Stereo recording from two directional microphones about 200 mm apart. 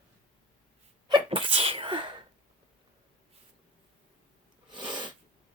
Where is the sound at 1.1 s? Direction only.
25° right (ahead or behind).